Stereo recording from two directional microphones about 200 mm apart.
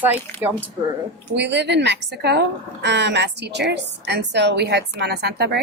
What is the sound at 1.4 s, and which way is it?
A woman's voice, 60° right (ahead or behind).